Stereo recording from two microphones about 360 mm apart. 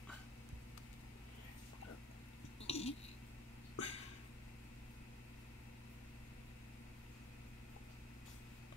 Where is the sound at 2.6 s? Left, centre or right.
Centre.